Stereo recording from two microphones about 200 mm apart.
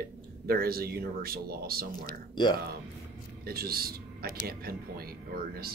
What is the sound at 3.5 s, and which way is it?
Speech, 50° right (ahead or behind).